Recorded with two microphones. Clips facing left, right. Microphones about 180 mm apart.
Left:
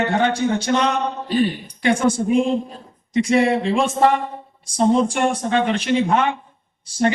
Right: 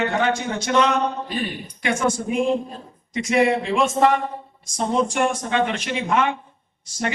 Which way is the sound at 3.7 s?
30° left (ahead or behind).